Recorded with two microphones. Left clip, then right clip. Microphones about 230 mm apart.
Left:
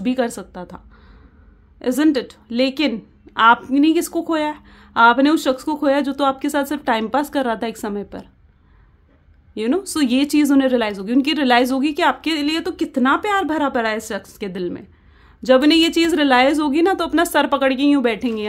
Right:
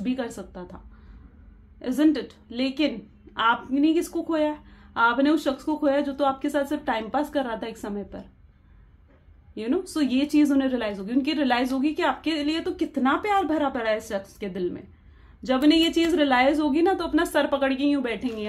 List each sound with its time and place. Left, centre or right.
0.0 s speech: left
9.6 s speech: left